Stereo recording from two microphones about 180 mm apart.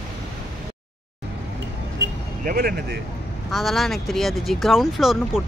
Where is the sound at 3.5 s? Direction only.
Centre (ahead or behind).